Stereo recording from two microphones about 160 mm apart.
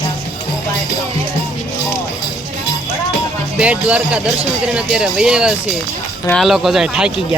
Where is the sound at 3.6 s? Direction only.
5° right (ahead or behind).